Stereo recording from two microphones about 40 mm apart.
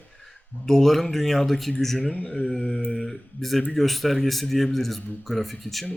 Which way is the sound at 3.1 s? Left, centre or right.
Centre.